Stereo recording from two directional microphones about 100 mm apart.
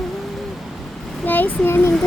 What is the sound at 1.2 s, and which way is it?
Speech, 15° left (ahead or behind).